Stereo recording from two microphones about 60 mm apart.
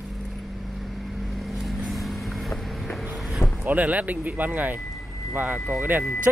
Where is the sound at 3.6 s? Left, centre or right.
Right.